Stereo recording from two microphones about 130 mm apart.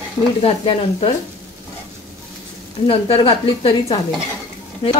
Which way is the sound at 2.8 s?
45° left (ahead or behind).